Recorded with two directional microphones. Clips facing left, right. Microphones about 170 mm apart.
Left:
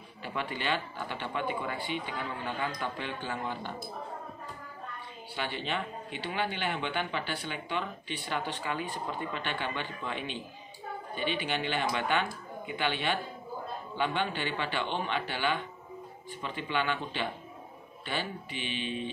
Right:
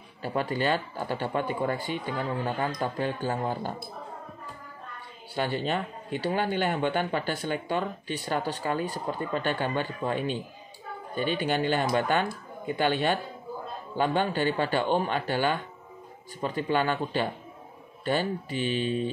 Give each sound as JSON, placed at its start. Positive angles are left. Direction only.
{"t": 0.2, "sound": "speech", "side_deg": -40}
{"t": 5.3, "sound": "speech", "side_deg": -40}